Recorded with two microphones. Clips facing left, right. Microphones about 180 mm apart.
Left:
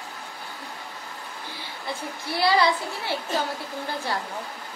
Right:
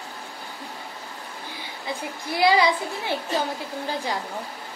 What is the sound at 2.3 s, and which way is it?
Speech, 15° right (ahead or behind).